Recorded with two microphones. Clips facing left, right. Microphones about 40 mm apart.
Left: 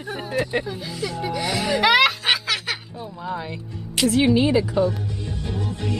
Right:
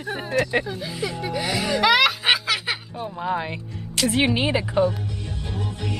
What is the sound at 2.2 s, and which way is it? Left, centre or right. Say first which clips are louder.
Snicker: right 1 dB; centre.